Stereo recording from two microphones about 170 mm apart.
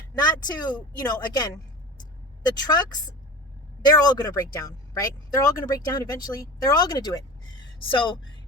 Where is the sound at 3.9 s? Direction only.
20° left (ahead or behind).